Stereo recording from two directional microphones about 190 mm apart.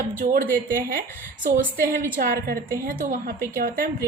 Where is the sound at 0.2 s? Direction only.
45° right (ahead or behind).